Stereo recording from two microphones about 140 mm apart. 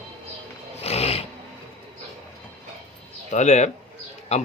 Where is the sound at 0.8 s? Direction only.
45° left (ahead or behind).